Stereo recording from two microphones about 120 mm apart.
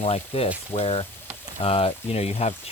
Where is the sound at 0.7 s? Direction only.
55° left (ahead or behind).